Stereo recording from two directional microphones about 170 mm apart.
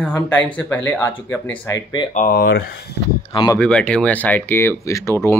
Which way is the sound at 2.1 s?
55° left (ahead or behind).